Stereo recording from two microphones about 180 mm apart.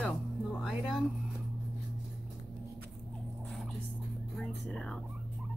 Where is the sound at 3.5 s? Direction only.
Centre (ahead or behind).